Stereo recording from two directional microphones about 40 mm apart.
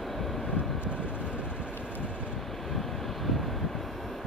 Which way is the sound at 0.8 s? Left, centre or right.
Right.